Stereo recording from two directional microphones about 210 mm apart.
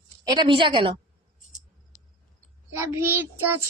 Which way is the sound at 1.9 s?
35° left (ahead or behind).